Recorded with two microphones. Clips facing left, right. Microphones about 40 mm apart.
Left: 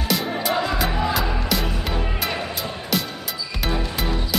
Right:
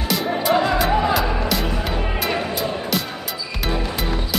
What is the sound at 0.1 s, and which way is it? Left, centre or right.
Music, centre.